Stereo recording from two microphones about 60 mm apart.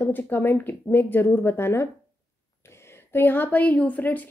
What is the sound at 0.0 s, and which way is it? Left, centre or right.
Speech, left.